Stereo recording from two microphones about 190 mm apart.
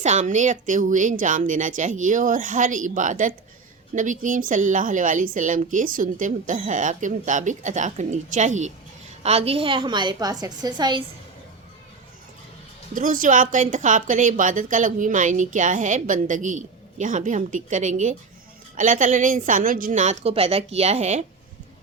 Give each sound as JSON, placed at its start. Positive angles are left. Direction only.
{"t": 0.0, "sound": "a woman's voice", "side_deg": -40}
{"t": 12.9, "sound": "a woman's voice", "side_deg": -45}